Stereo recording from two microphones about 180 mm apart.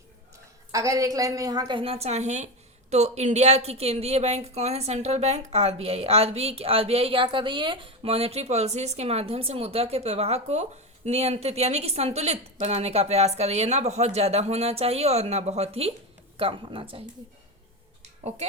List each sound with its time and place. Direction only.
0.7 s a woman's voice: 20° right (ahead or behind)
18.2 s speech: 35° right (ahead or behind)